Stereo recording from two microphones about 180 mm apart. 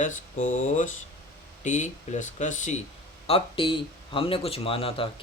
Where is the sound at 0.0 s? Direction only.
40° left (ahead or behind).